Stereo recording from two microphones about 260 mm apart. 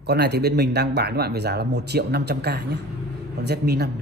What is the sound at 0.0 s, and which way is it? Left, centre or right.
Speech, right.